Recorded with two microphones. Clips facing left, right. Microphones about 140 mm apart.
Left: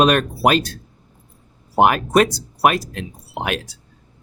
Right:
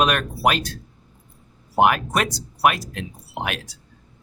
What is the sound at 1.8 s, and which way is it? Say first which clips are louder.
Speech: left 4 dB; 35° left (ahead or behind).